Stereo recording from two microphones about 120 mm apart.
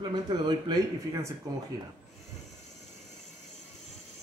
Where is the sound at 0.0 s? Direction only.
40° right (ahead or behind).